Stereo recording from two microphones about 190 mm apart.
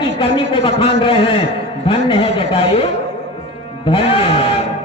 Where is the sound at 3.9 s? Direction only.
30° left (ahead or behind).